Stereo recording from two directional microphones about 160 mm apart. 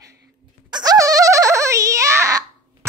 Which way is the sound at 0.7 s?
25° right (ahead or behind).